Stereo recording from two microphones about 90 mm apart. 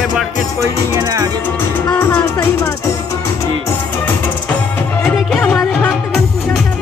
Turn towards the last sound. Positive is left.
turn(degrees=10)  # may be behind; listen again after turning